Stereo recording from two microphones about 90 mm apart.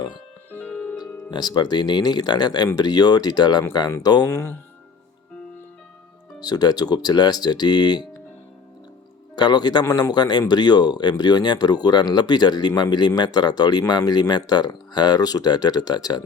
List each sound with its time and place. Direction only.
0.5 s music: 20° left (ahead or behind)
0.9 s speech: 50° left (ahead or behind)
4.3 s speech: 30° left (ahead or behind)
6.4 s speech: 50° left (ahead or behind)
9.3 s speech: 55° left (ahead or behind)